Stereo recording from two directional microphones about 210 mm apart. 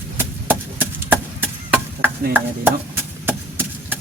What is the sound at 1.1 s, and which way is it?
Chop, 10° right (ahead or behind).